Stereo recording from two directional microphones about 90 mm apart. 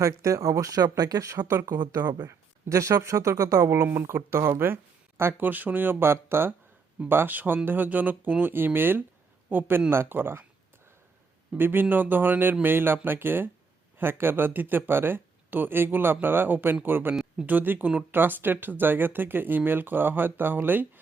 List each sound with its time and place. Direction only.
0.0 s speech: 35° right (ahead or behind)
11.5 s speech: 25° right (ahead or behind)